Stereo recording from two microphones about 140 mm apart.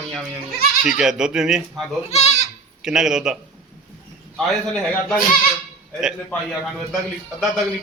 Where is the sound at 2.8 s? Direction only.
5° right (ahead or behind).